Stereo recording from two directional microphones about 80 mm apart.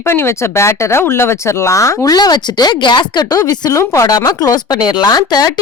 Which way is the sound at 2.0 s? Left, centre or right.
Left.